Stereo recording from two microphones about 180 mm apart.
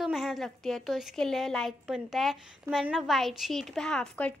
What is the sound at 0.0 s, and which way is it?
A woman's voice, centre (ahead or behind).